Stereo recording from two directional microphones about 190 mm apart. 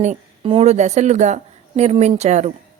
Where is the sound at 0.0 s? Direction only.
35° right (ahead or behind).